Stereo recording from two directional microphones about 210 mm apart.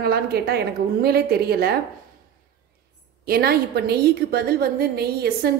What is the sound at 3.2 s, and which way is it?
A woman's voice, 45° right (ahead or behind).